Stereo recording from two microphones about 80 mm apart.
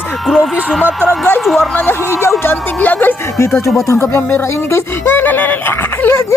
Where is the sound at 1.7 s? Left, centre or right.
Left.